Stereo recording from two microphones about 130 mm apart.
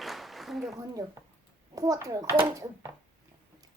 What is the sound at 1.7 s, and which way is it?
A child's voice, 25° right (ahead or behind).